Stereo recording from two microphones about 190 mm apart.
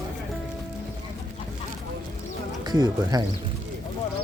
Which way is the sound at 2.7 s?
20° right (ahead or behind).